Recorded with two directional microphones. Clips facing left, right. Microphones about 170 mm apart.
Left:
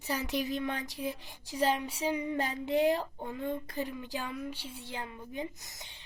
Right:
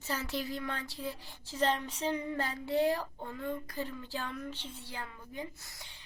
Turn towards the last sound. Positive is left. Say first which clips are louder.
# left 2 dB
turn(degrees=20)  # may be behind; listen again after turning